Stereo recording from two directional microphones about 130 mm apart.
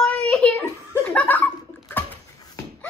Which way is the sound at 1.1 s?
10° left (ahead or behind).